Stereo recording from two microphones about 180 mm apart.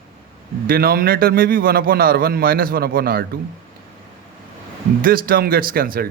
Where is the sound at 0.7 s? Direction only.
55° right (ahead or behind).